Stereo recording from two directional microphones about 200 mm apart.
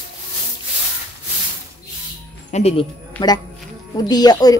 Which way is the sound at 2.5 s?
30° left (ahead or behind).